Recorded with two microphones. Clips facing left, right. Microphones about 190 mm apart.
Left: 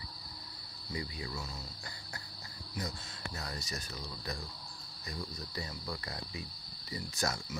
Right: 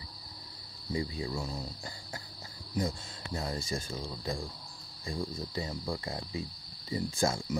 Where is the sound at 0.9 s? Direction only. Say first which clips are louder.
Right 6 dB; 25° right (ahead or behind).